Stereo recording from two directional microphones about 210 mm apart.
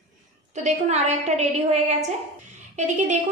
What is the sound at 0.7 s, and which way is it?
A woman's voice, 30° right (ahead or behind).